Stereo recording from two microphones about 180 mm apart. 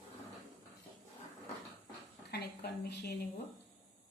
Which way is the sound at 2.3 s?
65° left (ahead or behind).